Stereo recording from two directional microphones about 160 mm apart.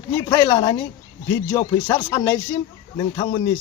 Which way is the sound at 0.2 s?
25° left (ahead or behind).